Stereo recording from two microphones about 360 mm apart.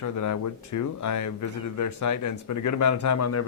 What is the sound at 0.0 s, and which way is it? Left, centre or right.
Speech, left.